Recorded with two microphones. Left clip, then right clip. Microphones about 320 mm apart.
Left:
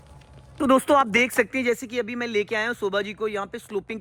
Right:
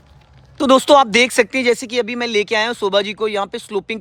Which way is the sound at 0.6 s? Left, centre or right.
Centre.